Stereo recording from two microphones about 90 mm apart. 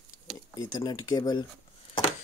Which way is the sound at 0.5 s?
45° left (ahead or behind).